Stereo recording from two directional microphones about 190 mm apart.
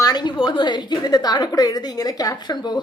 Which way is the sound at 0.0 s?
20° left (ahead or behind).